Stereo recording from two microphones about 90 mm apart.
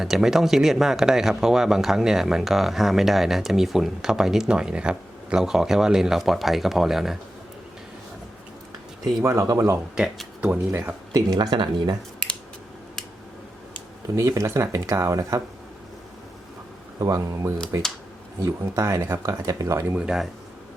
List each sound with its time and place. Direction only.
0.0 s speech: 5° right (ahead or behind)
9.2 s speech: 35° right (ahead or behind)
9.9 s speech: 5° right (ahead or behind)
10.7 s speech: 25° right (ahead or behind)
11.3 s speech: 55° right (ahead or behind)
14.2 s speech: 35° right (ahead or behind)
17.0 s speech: 40° right (ahead or behind)
20.0 s speech: 10° right (ahead or behind)